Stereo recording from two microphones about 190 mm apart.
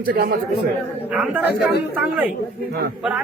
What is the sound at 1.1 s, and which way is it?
Speech, 5° right (ahead or behind).